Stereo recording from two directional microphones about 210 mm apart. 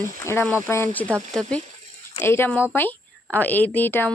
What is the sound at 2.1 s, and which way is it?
A woman's voice, 10° left (ahead or behind).